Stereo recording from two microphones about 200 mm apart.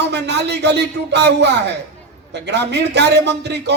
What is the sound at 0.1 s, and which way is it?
Speech, 55° right (ahead or behind).